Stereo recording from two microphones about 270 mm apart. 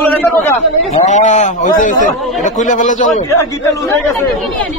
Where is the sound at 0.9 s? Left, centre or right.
Left.